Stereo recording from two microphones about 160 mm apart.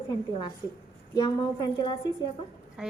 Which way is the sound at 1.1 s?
25° left (ahead or behind).